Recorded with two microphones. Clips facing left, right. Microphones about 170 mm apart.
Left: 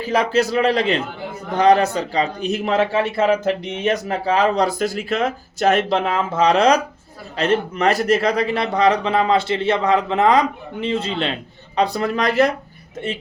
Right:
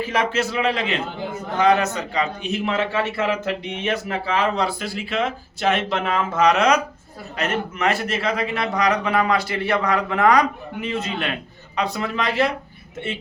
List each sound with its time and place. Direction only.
0.0 s speech: 35° left (ahead or behind)
6.3 s a man's voice: 30° left (ahead or behind)